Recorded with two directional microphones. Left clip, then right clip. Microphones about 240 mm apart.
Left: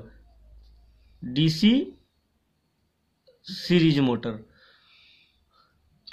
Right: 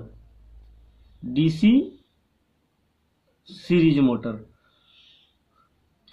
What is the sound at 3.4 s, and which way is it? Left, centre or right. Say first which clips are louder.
Speech: right 2 dB; left.